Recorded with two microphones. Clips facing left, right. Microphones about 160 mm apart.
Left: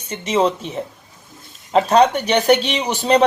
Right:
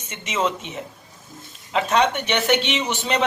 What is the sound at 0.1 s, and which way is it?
Speech, 35° left (ahead or behind).